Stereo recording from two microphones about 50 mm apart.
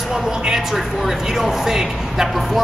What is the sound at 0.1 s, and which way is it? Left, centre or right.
Speech, centre.